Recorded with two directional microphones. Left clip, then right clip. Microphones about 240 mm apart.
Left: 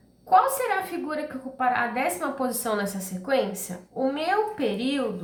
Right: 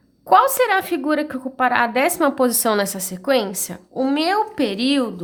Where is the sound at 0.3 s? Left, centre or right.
Right.